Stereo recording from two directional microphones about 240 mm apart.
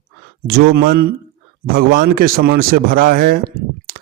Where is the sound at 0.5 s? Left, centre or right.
Right.